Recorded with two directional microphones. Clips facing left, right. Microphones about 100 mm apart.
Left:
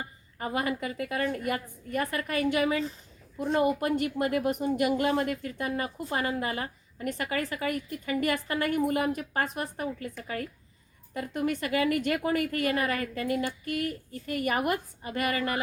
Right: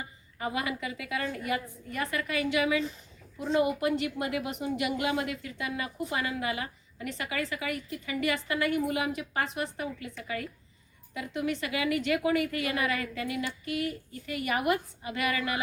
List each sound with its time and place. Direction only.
0.0 s a woman's voice: 45° left (ahead or behind)